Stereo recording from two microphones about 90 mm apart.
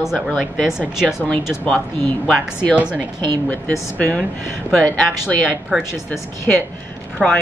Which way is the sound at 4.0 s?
15° left (ahead or behind).